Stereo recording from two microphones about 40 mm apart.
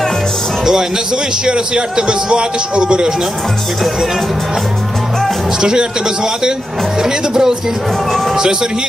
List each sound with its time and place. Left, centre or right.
0.6 s a man's voice: centre
5.5 s a man's voice: centre